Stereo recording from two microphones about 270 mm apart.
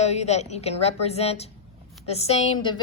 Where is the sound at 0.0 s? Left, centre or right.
Left.